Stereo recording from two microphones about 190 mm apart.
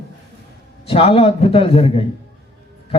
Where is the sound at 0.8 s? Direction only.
30° left (ahead or behind).